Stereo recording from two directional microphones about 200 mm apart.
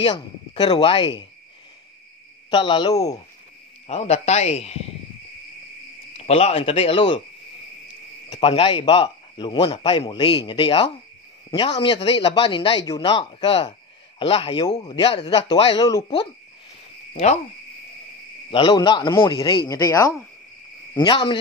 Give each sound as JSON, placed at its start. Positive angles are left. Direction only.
{"t": 0.0, "sound": "speech", "side_deg": 25}
{"t": 2.5, "sound": "a man's voice", "side_deg": 25}
{"t": 3.8, "sound": "a man's voice", "side_deg": 30}
{"t": 6.1, "sound": "a man's voice", "side_deg": 30}
{"t": 8.3, "sound": "a man's voice", "side_deg": 25}
{"t": 17.1, "sound": "owl", "side_deg": 35}
{"t": 18.5, "sound": "a man's voice", "side_deg": 25}